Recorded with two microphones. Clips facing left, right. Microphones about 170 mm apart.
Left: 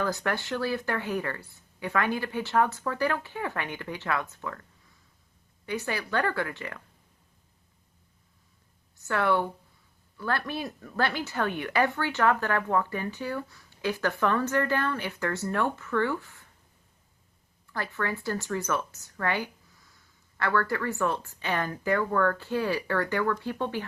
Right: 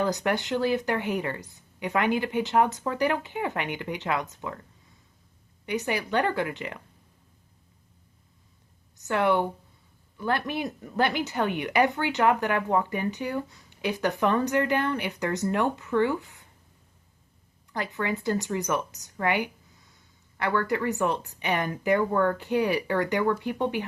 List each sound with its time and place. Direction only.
0.0 s speech: 20° right (ahead or behind)
5.6 s a woman's voice: 15° right (ahead or behind)
9.0 s speech: 20° right (ahead or behind)
17.7 s speech: 20° right (ahead or behind)